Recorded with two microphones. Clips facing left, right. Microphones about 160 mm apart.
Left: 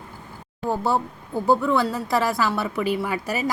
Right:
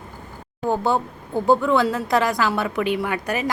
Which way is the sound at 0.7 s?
Centre (ahead or behind).